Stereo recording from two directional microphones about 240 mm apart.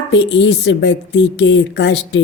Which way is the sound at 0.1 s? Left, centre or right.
Left.